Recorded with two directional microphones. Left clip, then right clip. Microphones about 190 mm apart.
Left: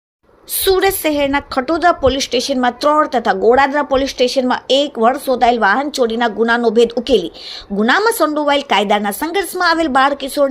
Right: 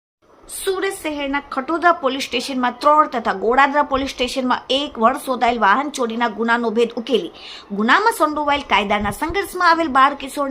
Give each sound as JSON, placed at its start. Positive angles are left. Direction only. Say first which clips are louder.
{"t": 0.6, "sound": "a woman's voice", "louder": "left 8 dB", "side_deg": 35}